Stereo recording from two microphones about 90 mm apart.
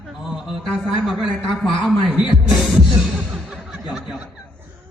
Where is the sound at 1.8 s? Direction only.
15° right (ahead or behind).